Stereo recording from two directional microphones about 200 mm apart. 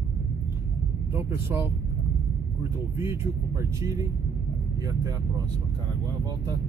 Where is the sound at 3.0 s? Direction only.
15° right (ahead or behind).